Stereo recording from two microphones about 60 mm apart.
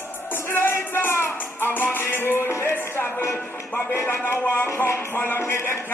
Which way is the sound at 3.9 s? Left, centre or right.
Left.